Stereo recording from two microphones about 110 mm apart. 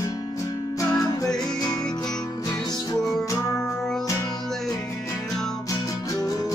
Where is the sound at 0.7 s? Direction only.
35° left (ahead or behind).